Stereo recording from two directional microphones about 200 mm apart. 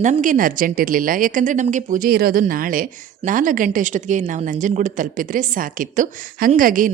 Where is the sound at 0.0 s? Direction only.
40° right (ahead or behind).